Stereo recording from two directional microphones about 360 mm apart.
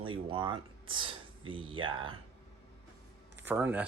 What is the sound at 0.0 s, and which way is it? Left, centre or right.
Speech, centre.